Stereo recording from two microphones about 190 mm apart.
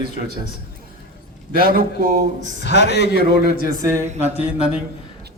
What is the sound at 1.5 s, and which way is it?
Speech, 50° right (ahead or behind).